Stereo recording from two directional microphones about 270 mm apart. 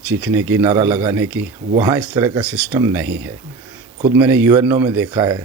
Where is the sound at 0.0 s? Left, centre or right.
Centre.